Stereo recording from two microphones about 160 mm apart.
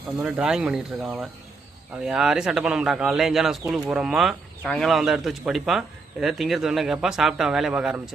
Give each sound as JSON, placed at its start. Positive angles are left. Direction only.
{"t": 0.2, "sound": "speech", "side_deg": -5}